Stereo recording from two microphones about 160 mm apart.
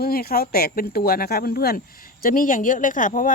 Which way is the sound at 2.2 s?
60° left (ahead or behind).